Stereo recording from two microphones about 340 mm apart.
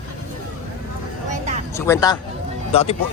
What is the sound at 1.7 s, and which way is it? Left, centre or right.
Speech, centre.